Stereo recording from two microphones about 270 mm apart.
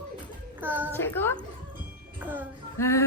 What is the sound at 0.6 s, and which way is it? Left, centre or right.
Speech, centre.